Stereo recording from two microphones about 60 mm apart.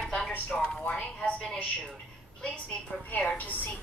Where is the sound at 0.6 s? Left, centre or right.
Left.